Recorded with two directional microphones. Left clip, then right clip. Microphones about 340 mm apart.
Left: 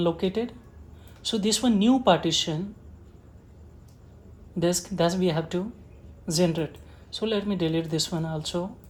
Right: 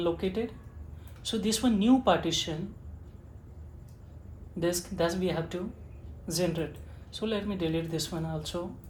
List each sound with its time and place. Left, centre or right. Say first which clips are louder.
0.0 s speech: left 4 dB; left
4.6 s speech: left 4 dB; left